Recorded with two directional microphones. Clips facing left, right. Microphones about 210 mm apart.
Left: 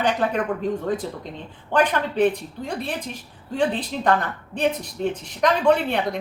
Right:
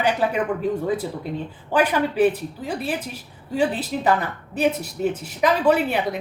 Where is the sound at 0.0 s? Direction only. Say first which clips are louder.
Right 1 dB; 10° right (ahead or behind).